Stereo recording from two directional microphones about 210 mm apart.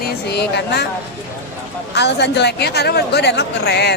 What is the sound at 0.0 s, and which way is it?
Speech, 50° left (ahead or behind).